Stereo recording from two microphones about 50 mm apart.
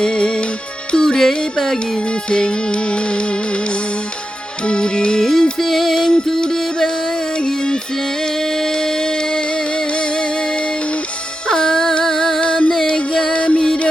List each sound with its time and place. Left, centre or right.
0.0 s music: centre
4.6 s music: centre
11.4 s a sound: centre
12.4 s music: centre